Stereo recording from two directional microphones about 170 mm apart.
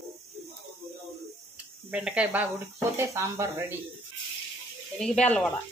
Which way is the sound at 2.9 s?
15° right (ahead or behind).